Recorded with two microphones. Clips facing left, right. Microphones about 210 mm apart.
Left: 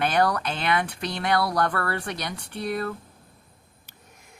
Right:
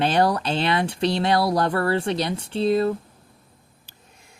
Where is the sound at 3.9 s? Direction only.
30° right (ahead or behind).